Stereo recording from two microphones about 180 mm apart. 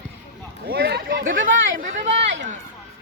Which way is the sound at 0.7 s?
60° right (ahead or behind).